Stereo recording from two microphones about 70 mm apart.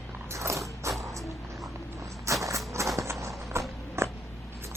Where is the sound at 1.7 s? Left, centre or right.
Right.